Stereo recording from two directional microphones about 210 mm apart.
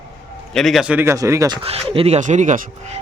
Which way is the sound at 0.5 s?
Centre (ahead or behind).